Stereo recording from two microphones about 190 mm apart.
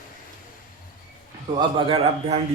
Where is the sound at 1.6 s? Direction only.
25° right (ahead or behind).